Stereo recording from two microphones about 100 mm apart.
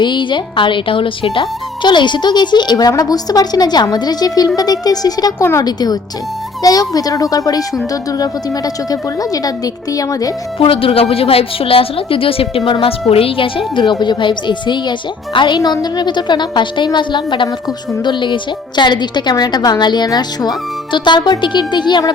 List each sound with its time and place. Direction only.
0.0 s speech: 50° left (ahead or behind)
5.4 s speech: 25° left (ahead or behind)
5.6 s a woman's voice: 40° left (ahead or behind)
10.6 s a woman's voice: 65° left (ahead or behind); by 22.1 s 50° left (ahead or behind)